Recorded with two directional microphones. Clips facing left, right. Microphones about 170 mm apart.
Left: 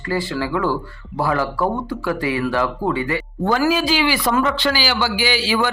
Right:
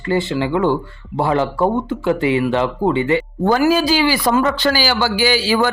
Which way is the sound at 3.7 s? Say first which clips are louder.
Right 3 dB; 40° right (ahead or behind).